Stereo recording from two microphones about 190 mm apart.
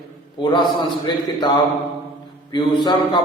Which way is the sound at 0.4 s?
25° left (ahead or behind).